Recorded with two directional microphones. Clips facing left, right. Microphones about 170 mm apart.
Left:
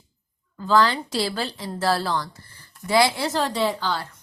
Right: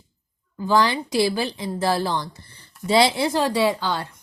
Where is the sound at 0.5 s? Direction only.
15° right (ahead or behind).